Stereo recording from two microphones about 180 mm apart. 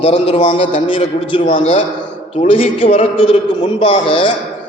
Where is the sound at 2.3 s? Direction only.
30° left (ahead or behind).